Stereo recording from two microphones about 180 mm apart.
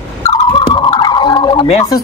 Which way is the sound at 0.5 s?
25° left (ahead or behind).